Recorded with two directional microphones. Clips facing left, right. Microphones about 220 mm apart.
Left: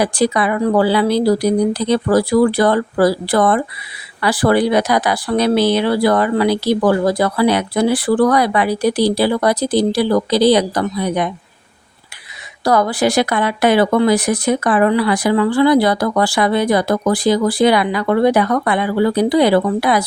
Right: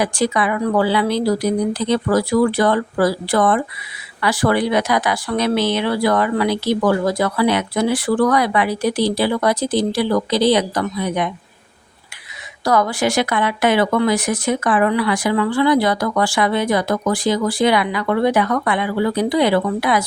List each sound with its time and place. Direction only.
0.0 s speech: 35° left (ahead or behind)
12.6 s speech: 35° left (ahead or behind)